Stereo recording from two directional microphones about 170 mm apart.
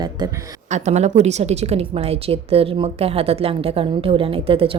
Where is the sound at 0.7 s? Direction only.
40° right (ahead or behind).